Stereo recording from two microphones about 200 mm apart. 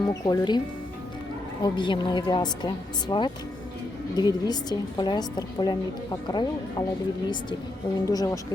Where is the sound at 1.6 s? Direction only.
25° left (ahead or behind).